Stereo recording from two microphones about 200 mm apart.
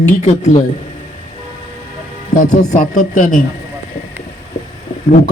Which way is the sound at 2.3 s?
40° left (ahead or behind).